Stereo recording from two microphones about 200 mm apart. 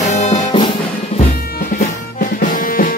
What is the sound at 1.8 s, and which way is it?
Music, 45° left (ahead or behind).